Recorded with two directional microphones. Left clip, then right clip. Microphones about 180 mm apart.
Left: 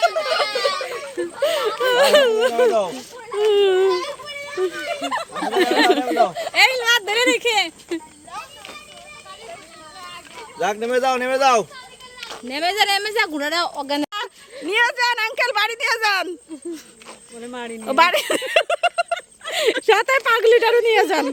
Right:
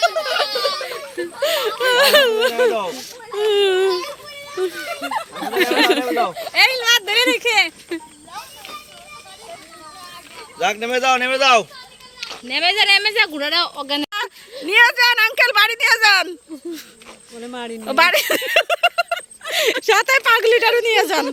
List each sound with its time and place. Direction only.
0.3 s a sound: centre (ahead or behind)
2.8 s speech: 10° left (ahead or behind)
3.5 s baby cry: 5° left (ahead or behind)
4.6 s a woman's voice: 5° left (ahead or behind)
10.6 s speech: 45° left (ahead or behind); by 14.1 s 70° left (ahead or behind)
14.7 s a woman's voice: centre (ahead or behind)
17.4 s speech: 60° right (ahead or behind)
17.8 s a woman's voice: 5° left (ahead or behind)